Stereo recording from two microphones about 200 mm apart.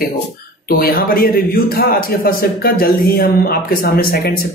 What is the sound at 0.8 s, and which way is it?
Speech, 50° left (ahead or behind).